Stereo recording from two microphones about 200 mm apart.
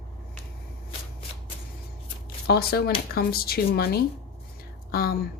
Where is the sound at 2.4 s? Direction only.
50° left (ahead or behind).